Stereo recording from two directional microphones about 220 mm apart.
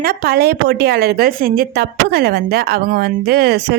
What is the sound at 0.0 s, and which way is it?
A woman's voice, 45° right (ahead or behind).